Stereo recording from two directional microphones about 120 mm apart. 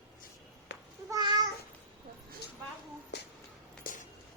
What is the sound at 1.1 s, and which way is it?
Babbling, 35° right (ahead or behind).